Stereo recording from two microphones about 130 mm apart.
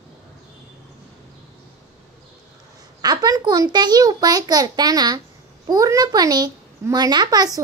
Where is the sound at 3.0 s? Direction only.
30° right (ahead or behind).